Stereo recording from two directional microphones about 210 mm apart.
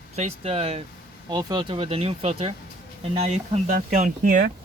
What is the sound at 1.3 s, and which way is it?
Speech, 20° right (ahead or behind).